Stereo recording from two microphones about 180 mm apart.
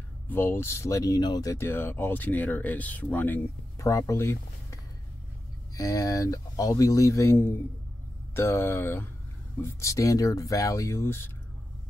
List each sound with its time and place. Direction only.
0.3 s speech: 10° left (ahead or behind)
5.8 s speech: 20° left (ahead or behind)